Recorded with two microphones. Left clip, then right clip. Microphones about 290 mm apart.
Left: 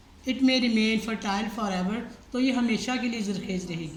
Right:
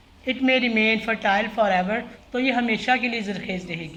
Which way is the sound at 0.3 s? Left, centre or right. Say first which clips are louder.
Right 4 dB; centre.